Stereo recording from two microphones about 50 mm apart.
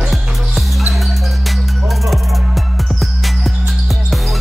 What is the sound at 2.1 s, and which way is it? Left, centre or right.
Music, centre.